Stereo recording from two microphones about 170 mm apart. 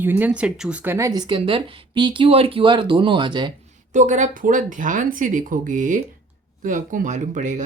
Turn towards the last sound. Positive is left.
turn(degrees=-45)  # may be behind; listen again after turning